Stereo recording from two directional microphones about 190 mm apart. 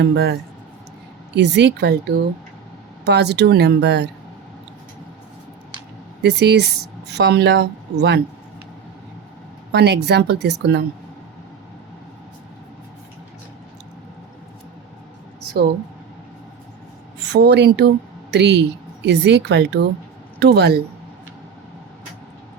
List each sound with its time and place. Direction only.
0.0 s speech: 60° right (ahead or behind)
1.4 s speech: 65° right (ahead or behind)
6.2 s speech: 60° right (ahead or behind)
9.7 s speech: 60° right (ahead or behind)
17.2 s a woman's voice: 60° right (ahead or behind)